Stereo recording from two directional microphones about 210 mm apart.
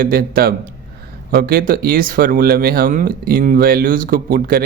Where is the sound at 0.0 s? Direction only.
45° right (ahead or behind).